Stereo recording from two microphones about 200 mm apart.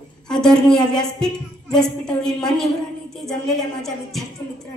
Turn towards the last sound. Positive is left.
turn(degrees=0)  # may be behind; listen again after turning